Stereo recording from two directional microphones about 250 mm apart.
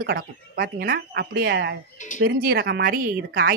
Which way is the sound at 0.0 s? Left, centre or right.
Right.